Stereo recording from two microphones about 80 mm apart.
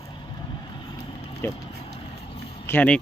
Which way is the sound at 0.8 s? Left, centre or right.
Left.